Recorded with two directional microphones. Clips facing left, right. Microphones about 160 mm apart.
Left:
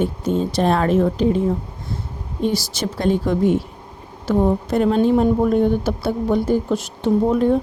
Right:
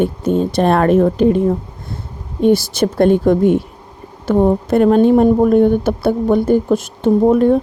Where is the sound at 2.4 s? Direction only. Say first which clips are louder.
Right 9 dB; 55° right (ahead or behind).